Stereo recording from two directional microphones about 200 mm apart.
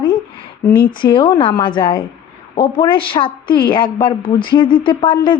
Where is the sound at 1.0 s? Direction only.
25° left (ahead or behind).